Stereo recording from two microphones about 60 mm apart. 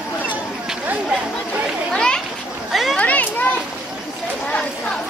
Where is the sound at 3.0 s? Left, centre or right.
Left.